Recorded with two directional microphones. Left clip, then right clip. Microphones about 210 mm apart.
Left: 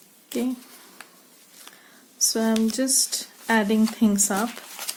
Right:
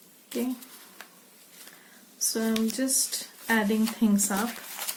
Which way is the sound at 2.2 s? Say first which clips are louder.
Left 6 dB; 50° left (ahead or behind).